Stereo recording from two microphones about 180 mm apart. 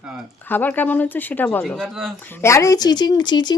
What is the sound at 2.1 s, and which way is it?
Speech, 10° left (ahead or behind).